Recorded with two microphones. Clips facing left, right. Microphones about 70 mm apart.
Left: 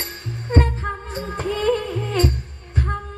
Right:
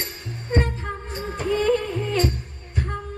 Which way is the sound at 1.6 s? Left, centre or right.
Left.